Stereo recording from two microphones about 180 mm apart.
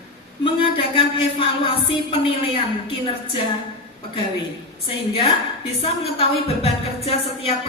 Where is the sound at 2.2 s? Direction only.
30° left (ahead or behind).